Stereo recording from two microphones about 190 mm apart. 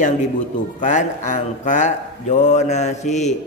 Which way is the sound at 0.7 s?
40° left (ahead or behind).